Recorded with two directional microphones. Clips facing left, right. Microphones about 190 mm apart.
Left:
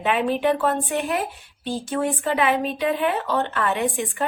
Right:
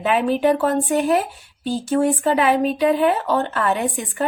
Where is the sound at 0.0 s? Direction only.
40° right (ahead or behind).